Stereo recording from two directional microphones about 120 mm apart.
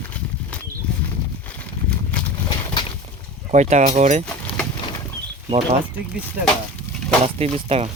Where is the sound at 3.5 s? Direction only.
80° right.